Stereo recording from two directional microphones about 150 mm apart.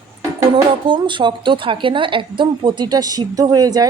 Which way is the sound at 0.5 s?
35° right (ahead or behind).